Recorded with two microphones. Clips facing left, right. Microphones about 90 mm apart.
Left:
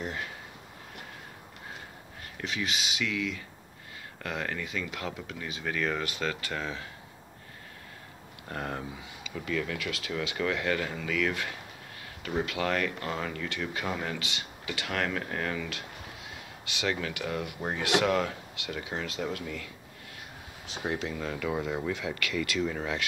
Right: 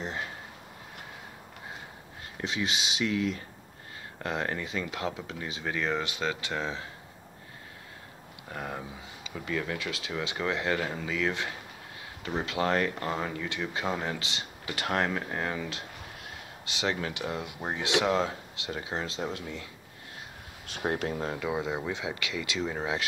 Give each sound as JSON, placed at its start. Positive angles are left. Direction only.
{"t": 2.3, "sound": "speech", "side_deg": -30}
{"t": 8.5, "sound": "speech", "side_deg": -5}
{"t": 9.2, "sound": "speech", "side_deg": -25}
{"t": 20.7, "sound": "speech", "side_deg": -50}
{"t": 21.4, "sound": "speech", "side_deg": -15}